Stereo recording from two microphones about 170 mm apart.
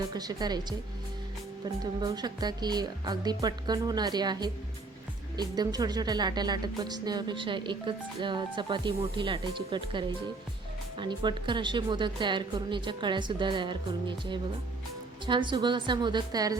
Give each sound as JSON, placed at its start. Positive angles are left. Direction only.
{"t": 0.1, "sound": "speech", "side_deg": -25}
{"t": 1.8, "sound": "speech", "side_deg": -25}
{"t": 15.3, "sound": "speech", "side_deg": -30}